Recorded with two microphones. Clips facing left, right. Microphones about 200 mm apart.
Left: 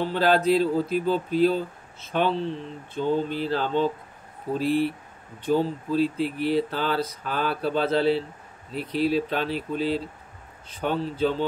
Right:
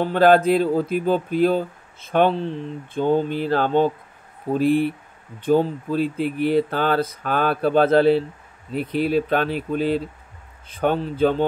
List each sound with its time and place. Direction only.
0.0 s speech: 55° right (ahead or behind)